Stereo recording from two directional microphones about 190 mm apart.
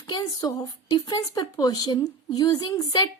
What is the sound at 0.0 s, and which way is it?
Speech, 20° left (ahead or behind).